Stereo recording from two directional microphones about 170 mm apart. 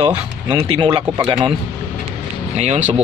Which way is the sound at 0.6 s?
30° right (ahead or behind).